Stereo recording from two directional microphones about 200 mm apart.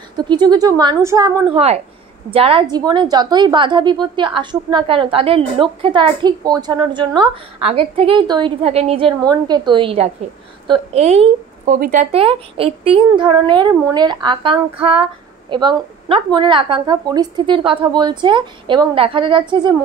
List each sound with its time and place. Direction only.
0.3 s a woman's voice: 20° right (ahead or behind)
1.5 s a woman's voice: 30° right (ahead or behind)